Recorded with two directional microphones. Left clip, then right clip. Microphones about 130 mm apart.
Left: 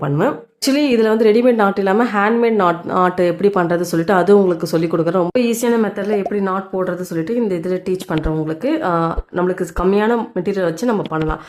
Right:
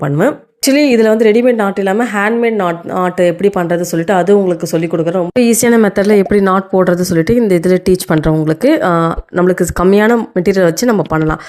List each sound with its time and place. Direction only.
0.0 s a woman's voice: 30° right (ahead or behind); by 5.2 s 10° right (ahead or behind)
5.3 s speech: 40° right (ahead or behind)